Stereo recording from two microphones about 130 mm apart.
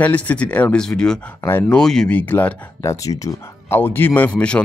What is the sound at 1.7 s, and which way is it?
Speech, 5° left (ahead or behind).